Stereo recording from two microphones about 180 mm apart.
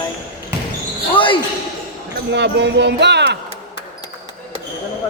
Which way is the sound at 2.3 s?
75° right (ahead or behind).